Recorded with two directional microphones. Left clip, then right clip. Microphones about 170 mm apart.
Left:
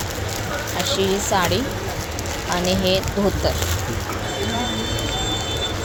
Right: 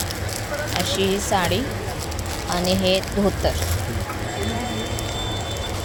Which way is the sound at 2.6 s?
5° right (ahead or behind).